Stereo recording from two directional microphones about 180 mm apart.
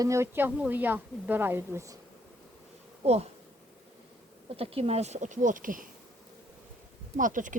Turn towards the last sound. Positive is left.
turn(degrees=-45)  # may be behind; listen again after turning